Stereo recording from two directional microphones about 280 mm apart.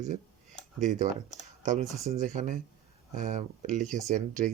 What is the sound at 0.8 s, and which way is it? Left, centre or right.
Speech, right.